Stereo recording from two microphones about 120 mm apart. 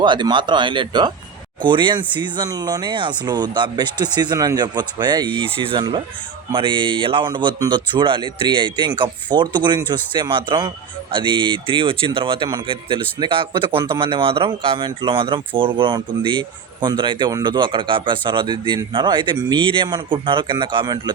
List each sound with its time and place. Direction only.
0.0 s speech: 40° right (ahead or behind)